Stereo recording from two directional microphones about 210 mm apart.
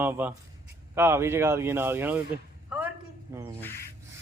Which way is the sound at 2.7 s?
5° right (ahead or behind).